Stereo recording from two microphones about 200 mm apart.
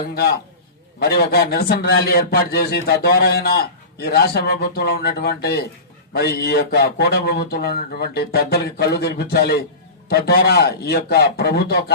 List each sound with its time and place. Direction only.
0.9 s a man's voice: 50° left (ahead or behind)